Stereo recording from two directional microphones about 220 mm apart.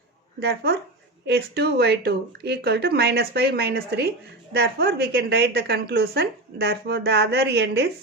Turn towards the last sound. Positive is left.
turn(degrees=-50)  # may be behind; listen again after turning